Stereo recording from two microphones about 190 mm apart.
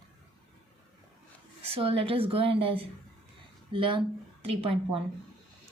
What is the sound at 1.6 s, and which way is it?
A woman's voice, 30° right (ahead or behind).